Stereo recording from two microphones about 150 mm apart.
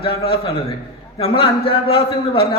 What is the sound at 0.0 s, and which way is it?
A man's voice, 35° left (ahead or behind).